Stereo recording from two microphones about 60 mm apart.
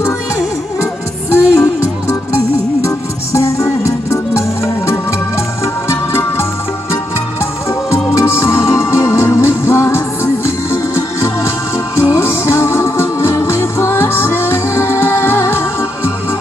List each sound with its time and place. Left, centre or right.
1.3 s music: left
7.9 s music: left